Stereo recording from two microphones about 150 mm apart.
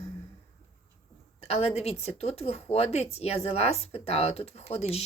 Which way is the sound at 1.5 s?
45° left (ahead or behind).